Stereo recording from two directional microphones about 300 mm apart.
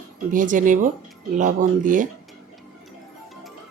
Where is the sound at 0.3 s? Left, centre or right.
Right.